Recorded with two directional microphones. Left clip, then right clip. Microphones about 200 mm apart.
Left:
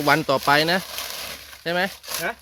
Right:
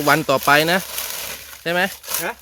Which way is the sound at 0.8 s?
25° right (ahead or behind).